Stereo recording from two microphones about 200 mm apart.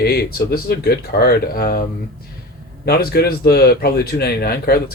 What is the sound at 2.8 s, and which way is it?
Speech, 50° left (ahead or behind).